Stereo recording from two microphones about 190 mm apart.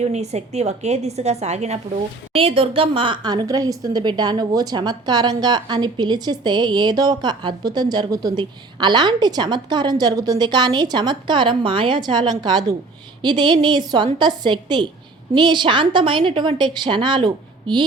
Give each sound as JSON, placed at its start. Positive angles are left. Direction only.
{"t": 0.0, "sound": "a woman's voice", "side_deg": -35}